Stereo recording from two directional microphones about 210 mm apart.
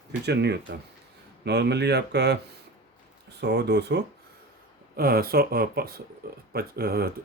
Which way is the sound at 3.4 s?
55° right (ahead or behind).